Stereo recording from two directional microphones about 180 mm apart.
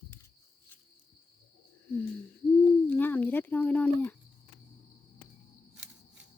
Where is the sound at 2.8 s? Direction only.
10° left (ahead or behind).